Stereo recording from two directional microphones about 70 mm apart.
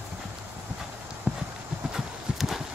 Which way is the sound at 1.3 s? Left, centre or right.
Centre.